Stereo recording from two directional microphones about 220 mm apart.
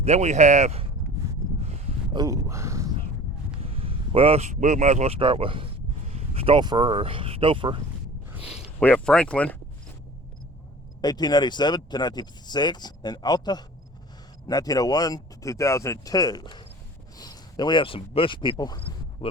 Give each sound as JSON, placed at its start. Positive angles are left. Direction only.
{"t": 0.0, "sound": "speech", "side_deg": -30}
{"t": 2.1, "sound": "speech", "side_deg": -15}
{"t": 3.8, "sound": "speech", "side_deg": -25}
{"t": 8.4, "sound": "a sound", "side_deg": -5}
{"t": 8.8, "sound": "speech", "side_deg": 5}
{"t": 11.0, "sound": "speech", "side_deg": 20}